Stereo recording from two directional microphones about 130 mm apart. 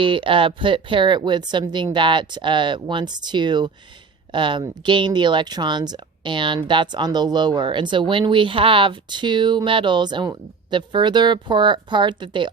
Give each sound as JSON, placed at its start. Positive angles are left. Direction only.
{"t": 0.0, "sound": "speech", "side_deg": -40}